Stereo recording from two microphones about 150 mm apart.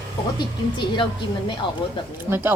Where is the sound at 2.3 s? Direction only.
15° right (ahead or behind).